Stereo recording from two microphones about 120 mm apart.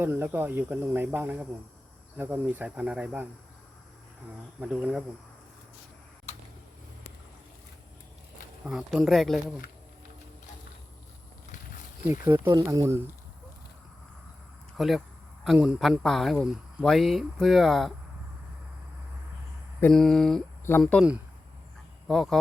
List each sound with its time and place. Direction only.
0.0 s speech: 15° right (ahead or behind)
4.6 s speech: 10° right (ahead or behind)
8.6 s speech: 5° right (ahead or behind)
12.0 s speech: 20° right (ahead or behind)
14.8 s speech: centre (ahead or behind)
19.9 s speech: centre (ahead or behind)
22.0 s speech: centre (ahead or behind)